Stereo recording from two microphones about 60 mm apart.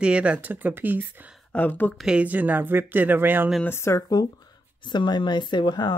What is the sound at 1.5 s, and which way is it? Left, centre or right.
Speech, left.